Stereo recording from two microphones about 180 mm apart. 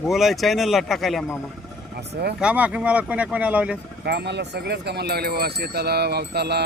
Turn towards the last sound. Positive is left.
turn(degrees=-65)  # may be behind; listen again after turning